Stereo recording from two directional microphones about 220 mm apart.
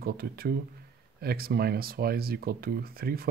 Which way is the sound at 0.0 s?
45° right (ahead or behind).